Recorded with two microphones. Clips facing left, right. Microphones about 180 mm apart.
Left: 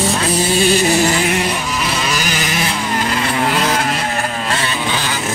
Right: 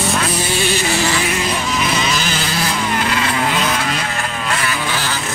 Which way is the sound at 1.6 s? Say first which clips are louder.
Right 1 dB; 5° left (ahead or behind).